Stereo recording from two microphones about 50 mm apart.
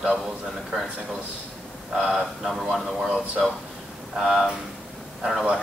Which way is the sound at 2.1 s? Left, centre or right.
Centre.